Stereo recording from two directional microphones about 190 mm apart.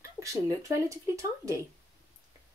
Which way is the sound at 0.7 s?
15° right (ahead or behind).